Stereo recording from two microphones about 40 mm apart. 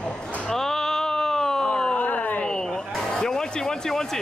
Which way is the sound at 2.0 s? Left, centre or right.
Left.